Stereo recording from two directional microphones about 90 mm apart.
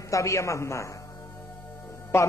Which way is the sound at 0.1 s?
35° left (ahead or behind).